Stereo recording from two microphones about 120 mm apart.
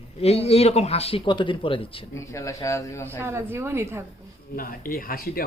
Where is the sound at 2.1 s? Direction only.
25° left (ahead or behind).